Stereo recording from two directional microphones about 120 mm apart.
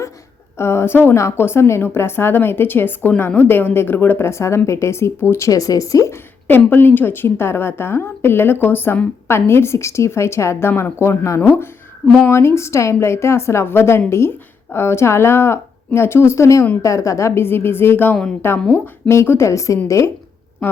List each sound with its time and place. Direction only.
0.5 s a woman's voice: 20° left (ahead or behind)